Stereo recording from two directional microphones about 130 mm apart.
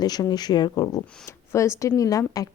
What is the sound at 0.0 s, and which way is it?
A woman's voice, 30° left (ahead or behind).